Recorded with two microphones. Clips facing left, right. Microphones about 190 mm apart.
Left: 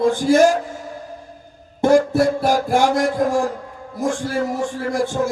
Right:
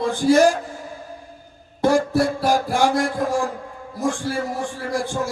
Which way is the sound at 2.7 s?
45° left (ahead or behind).